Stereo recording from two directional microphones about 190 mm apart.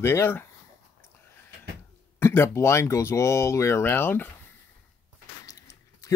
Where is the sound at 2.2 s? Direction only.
15° left (ahead or behind).